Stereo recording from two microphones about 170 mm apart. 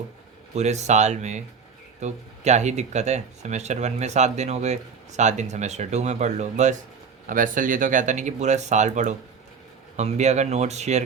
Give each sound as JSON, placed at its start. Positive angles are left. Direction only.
{"t": 0.5, "sound": "speech", "side_deg": -40}